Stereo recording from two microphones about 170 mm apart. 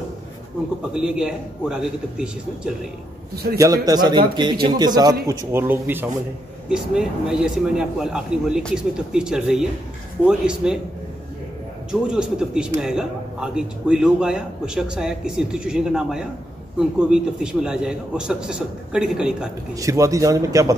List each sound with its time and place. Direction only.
0.9 s speech: 5° right (ahead or behind)
3.5 s a man's voice: 20° right (ahead or behind)
11.9 s speech: 5° right (ahead or behind)
19.7 s a man's voice: 20° right (ahead or behind)